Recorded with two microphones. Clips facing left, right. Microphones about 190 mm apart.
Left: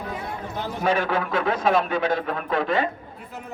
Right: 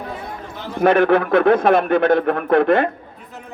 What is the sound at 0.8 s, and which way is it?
A man's voice, 55° right (ahead or behind).